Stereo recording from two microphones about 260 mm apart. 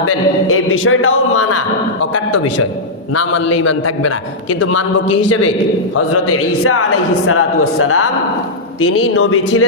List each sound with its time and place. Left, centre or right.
0.0 s a man's voice: left
6.2 s a man's voice: left